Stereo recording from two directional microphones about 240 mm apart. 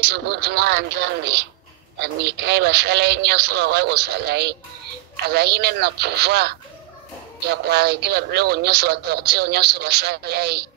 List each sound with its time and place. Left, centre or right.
0.1 s speech: right